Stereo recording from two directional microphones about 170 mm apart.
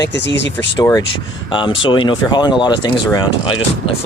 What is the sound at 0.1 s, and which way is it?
Speech, 90° left.